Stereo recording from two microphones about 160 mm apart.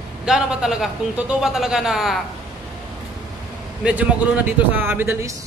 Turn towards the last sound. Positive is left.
turn(degrees=-15)  # may be behind; listen again after turning